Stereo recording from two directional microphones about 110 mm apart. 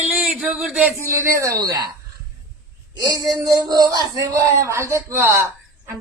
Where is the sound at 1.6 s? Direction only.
35° right (ahead or behind).